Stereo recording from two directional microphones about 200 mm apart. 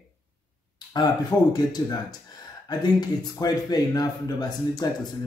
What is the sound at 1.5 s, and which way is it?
Speech, 20° left (ahead or behind).